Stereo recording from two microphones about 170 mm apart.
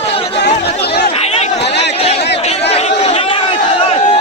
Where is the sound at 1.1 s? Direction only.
40° left (ahead or behind).